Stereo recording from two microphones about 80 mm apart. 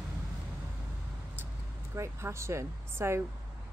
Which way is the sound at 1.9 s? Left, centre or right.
Right.